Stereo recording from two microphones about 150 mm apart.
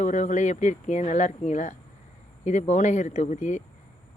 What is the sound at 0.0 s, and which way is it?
Speech, 55° left (ahead or behind).